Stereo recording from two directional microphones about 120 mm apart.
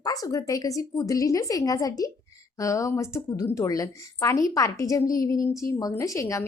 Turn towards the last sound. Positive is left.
turn(degrees=25)  # may be behind; listen again after turning